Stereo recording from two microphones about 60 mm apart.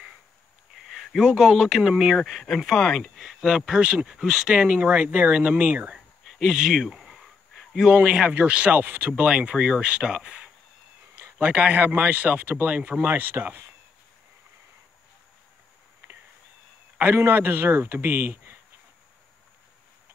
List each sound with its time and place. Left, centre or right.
0.8 s a sound: centre
1.3 s speech: centre
2.0 s speech: centre
2.2 s speech: centre
3.4 s speech: centre
6.4 s a sound: centre
7.9 s speech: centre
9.2 s speech: centre
13.1 s a man's voice: right
17.0 s a man's voice: right